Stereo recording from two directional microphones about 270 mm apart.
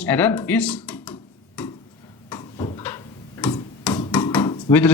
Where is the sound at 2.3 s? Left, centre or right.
Centre.